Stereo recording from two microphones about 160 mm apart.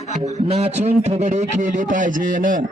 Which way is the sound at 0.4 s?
40° right (ahead or behind).